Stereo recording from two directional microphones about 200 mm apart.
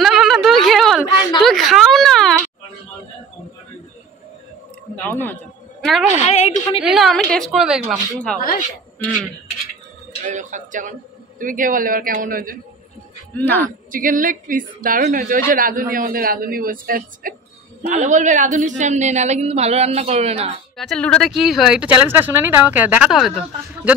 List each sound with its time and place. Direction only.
0.0 s a sound: centre (ahead or behind)
5.0 s a man's voice: 10° left (ahead or behind)
6.2 s a woman's voice: 35° left (ahead or behind)
6.8 s speech: centre (ahead or behind)
8.4 s a woman's voice: 45° left (ahead or behind)
10.2 s speech: 40° right (ahead or behind)
13.4 s speech: 10° left (ahead or behind)
13.7 s a woman's voice: 40° right (ahead or behind)
20.7 s speech: centre (ahead or behind)